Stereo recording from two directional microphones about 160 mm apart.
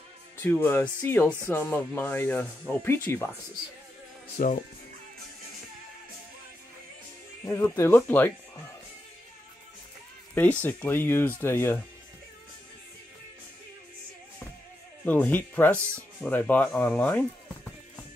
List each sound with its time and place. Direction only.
0.4 s speech: 15° left (ahead or behind)
4.4 s speech: 60° left (ahead or behind)
7.4 s speech: 15° left (ahead or behind)
10.3 s speech: 10° left (ahead or behind)
15.0 s speech: 10° left (ahead or behind)